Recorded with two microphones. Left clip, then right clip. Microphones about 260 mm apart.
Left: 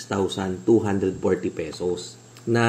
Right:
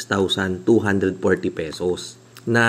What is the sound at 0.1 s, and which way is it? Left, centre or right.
Speech, right.